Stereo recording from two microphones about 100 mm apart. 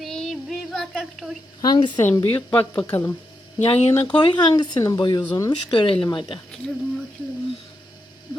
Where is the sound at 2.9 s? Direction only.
25° left (ahead or behind).